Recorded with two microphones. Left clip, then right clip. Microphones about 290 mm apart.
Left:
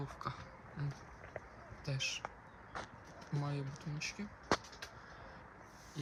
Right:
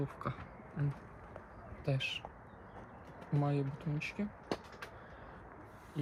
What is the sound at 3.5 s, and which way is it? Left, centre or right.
Speech, left.